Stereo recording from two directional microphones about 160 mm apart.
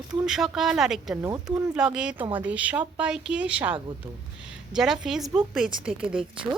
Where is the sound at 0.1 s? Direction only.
5° right (ahead or behind).